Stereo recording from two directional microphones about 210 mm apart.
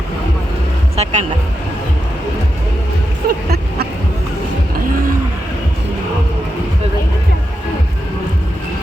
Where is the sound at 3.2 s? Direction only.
45° right (ahead or behind).